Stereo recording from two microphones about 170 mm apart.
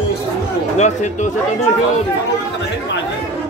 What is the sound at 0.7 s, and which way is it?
Speech, 45° left (ahead or behind).